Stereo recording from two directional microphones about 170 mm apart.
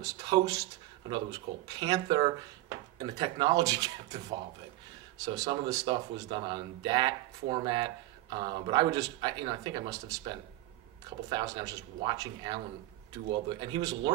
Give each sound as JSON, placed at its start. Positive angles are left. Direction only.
{"t": 0.0, "sound": "speech", "side_deg": -20}